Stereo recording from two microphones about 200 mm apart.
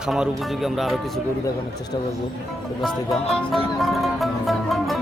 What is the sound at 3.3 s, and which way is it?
Music, centre (ahead or behind).